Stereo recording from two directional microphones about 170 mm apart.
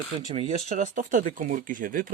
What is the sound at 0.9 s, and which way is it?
Speech, 50° right (ahead or behind).